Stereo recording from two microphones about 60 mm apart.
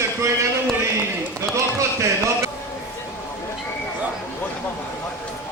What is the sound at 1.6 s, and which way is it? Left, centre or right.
Speech, right.